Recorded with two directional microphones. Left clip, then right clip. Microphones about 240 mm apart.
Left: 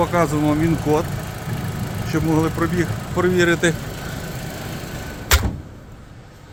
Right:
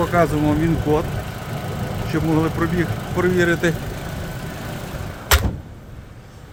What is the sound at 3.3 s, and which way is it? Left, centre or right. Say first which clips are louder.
Speech: left 2 dB; centre.